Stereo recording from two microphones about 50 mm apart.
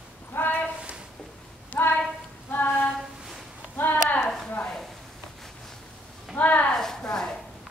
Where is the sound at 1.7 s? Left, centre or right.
Left.